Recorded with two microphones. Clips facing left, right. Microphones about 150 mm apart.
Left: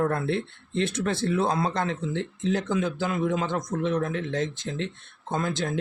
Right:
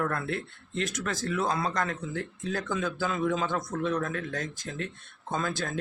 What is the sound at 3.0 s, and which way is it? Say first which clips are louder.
Speech: left 2 dB; 10° left (ahead or behind).